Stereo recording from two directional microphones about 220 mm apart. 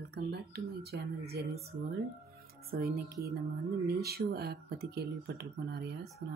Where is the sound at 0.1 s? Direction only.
50° right (ahead or behind).